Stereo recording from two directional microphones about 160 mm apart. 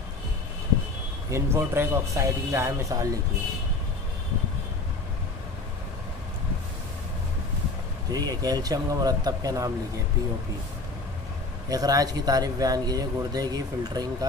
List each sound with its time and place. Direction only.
1.3 s speech: 15° right (ahead or behind)
8.1 s speech: 25° right (ahead or behind)
11.7 s speech: 25° right (ahead or behind)